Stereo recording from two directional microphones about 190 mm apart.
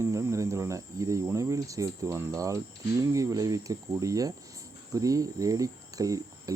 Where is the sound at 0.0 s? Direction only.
15° right (ahead or behind).